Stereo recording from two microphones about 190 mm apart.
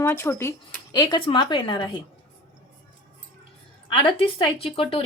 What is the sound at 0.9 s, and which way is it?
Speech, 25° left (ahead or behind).